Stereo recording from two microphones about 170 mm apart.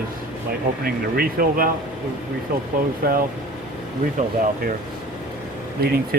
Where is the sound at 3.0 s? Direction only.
60° right (ahead or behind).